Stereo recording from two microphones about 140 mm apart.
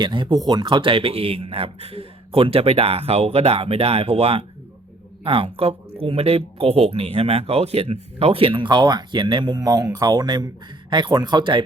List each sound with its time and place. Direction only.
0.0 s speech: 35° right (ahead or behind)